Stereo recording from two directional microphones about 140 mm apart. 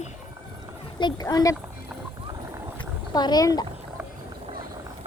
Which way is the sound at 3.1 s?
30° left (ahead or behind).